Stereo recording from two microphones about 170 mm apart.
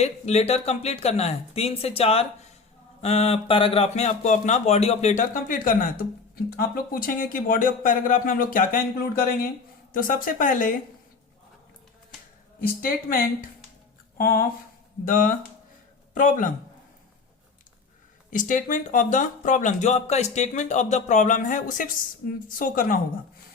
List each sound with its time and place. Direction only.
0.0 s speech: 40° left (ahead or behind)
12.5 s a woman's voice: 60° left (ahead or behind)
18.3 s speech: 50° left (ahead or behind)